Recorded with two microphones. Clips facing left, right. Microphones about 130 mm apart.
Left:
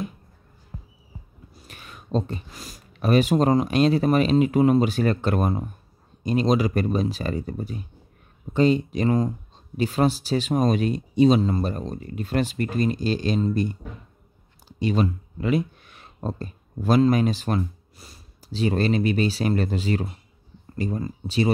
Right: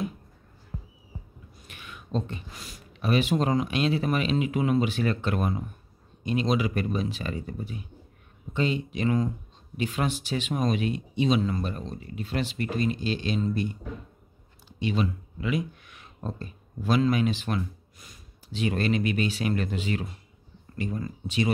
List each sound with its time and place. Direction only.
1.7 s speech: 40° left (ahead or behind)
14.8 s speech: 40° left (ahead or behind)